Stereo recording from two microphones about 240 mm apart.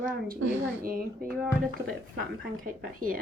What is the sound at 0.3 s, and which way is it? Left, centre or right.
Speech, right.